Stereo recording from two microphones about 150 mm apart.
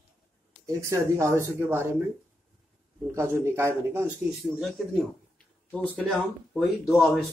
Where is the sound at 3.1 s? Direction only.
20° right (ahead or behind).